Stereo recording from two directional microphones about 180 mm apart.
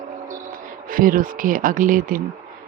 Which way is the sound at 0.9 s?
50° right (ahead or behind).